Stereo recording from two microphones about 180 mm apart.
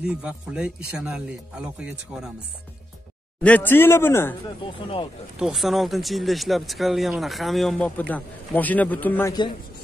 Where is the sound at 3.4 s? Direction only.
10° left (ahead or behind).